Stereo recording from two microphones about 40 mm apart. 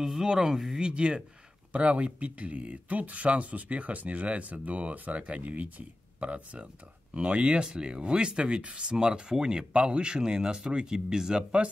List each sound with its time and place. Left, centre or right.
0.0 s speech: centre
1.7 s speech: right; by 11.4 s centre